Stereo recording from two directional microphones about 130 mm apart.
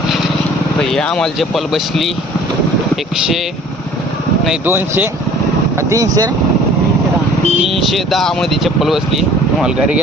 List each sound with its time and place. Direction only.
0.8 s speech: 5° left (ahead or behind)
4.6 s speech: 15° right (ahead or behind)
7.7 s speech: centre (ahead or behind)